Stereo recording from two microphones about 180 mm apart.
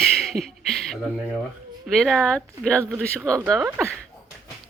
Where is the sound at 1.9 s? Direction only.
Centre (ahead or behind).